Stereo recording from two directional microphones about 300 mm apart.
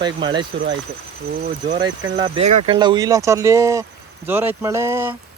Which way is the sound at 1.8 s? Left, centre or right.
Centre.